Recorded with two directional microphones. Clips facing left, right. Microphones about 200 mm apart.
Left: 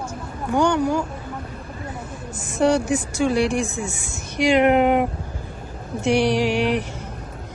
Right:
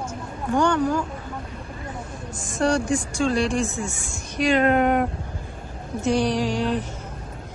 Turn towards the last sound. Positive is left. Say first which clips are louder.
# left 3 dB
turn(degrees=75)  # may be behind; listen again after turning